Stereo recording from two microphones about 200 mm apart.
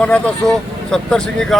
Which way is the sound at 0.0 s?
5° left (ahead or behind).